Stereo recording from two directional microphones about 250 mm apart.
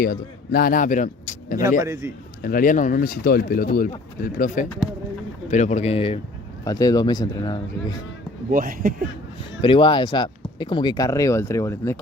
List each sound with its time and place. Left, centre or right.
0.0 s a man's voice: left
1.8 s a man's voice: centre
2.4 s speech: left; by 7.9 s centre
8.4 s speech: right
9.6 s speech: centre